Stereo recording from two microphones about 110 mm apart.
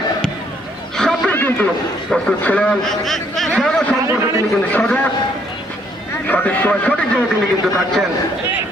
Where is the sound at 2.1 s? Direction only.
10° left (ahead or behind).